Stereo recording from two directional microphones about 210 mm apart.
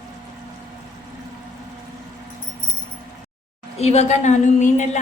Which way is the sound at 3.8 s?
30° left (ahead or behind).